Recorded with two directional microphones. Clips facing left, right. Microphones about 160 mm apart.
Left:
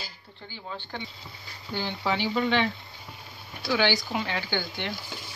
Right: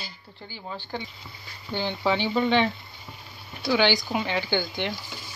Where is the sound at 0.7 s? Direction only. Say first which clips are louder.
Right 3 dB; 10° right (ahead or behind).